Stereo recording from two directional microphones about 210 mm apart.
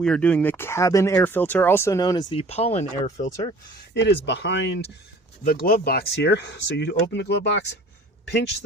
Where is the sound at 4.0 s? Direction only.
55° left (ahead or behind).